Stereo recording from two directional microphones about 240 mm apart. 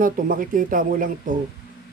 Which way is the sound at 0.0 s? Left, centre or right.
Right.